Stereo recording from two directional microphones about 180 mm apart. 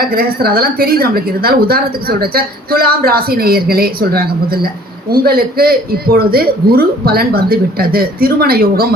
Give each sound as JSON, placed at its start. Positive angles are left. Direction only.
{"t": 0.0, "sound": "a woman's voice", "side_deg": -55}